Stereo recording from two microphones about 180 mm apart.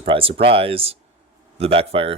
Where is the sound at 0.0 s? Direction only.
30° right (ahead or behind).